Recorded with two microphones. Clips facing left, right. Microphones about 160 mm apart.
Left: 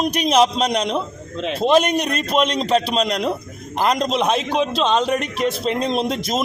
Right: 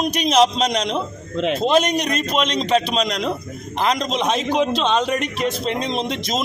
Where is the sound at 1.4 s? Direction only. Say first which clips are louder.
Right 4 dB; 35° left (ahead or behind).